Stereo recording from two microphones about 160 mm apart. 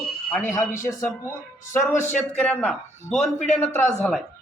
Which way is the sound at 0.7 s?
55° left (ahead or behind).